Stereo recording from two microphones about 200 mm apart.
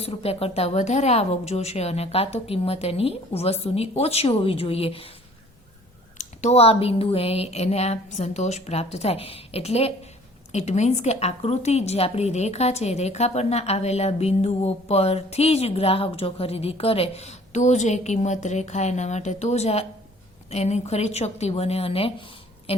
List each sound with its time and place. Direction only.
0.0 s a woman's voice: 30° left (ahead or behind)
6.1 s a woman's voice: 35° left (ahead or behind)